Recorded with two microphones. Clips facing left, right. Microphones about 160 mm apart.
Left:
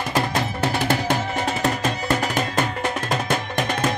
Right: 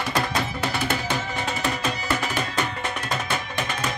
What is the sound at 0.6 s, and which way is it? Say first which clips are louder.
Music: left 4 dB; 50° left (ahead or behind).